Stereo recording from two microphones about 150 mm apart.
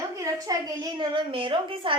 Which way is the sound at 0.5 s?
25° right (ahead or behind).